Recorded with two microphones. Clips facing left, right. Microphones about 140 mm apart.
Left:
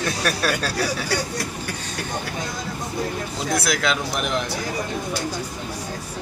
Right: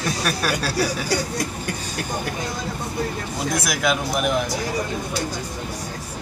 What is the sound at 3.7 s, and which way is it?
Speech, 10° right (ahead or behind).